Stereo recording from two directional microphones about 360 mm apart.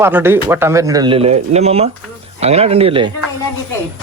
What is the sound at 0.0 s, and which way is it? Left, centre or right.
Speech, centre.